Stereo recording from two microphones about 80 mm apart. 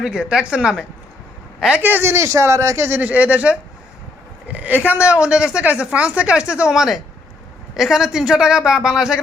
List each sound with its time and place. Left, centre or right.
0.0 s a woman's voice: centre
1.8 s speech: right
3.0 s a woman's voice: centre